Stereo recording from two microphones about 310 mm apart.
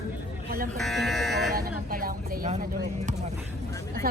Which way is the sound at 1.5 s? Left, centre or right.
Right.